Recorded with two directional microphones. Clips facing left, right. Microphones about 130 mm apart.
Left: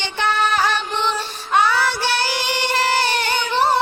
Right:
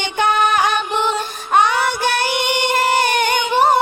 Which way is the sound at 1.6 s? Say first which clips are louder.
Right 1 dB; 20° right (ahead or behind).